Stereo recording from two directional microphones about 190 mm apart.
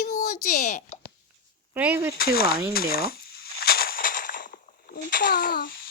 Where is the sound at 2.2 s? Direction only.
50° left (ahead or behind).